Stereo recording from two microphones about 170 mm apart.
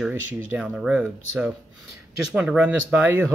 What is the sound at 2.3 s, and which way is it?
Speech, 5° right (ahead or behind).